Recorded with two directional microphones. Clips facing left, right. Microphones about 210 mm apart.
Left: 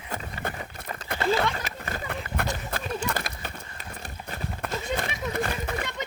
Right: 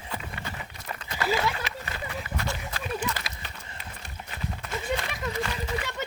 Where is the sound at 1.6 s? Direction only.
45° left (ahead or behind).